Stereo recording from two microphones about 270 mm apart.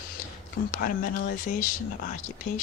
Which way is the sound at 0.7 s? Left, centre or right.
Left.